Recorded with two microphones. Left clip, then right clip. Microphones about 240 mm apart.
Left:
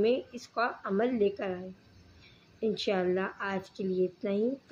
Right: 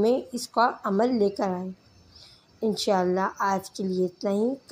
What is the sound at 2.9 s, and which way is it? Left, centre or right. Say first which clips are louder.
Speech: right 8 dB; centre.